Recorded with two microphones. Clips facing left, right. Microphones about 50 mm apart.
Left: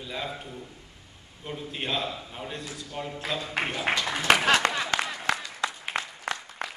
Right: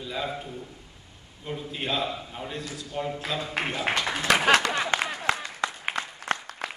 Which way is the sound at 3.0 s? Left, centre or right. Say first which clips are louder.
Right 5 dB; centre.